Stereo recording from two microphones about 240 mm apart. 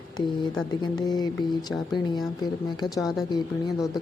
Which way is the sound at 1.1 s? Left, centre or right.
Centre.